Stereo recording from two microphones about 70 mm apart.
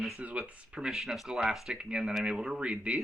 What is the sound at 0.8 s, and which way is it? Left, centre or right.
Speech, centre.